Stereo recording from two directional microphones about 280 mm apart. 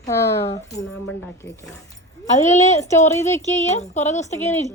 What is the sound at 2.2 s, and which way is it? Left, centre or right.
A woman's voice, left.